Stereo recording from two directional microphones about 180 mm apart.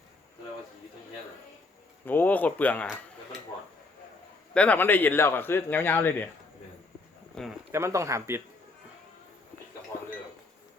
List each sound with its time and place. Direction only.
2.0 s speech: 10° left (ahead or behind)
4.5 s speech: 10° left (ahead or behind)
7.3 s a sound: 5° left (ahead or behind)
7.7 s speech: 15° right (ahead or behind)